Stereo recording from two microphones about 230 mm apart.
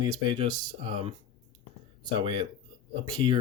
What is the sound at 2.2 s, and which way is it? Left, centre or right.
Speech, right.